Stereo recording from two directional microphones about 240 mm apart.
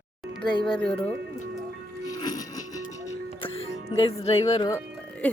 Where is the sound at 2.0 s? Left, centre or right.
Centre.